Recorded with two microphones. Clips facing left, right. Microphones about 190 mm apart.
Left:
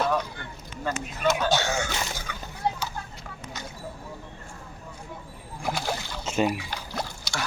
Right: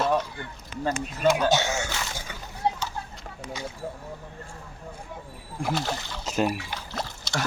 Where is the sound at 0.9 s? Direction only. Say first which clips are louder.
Right 3 dB; 35° right (ahead or behind).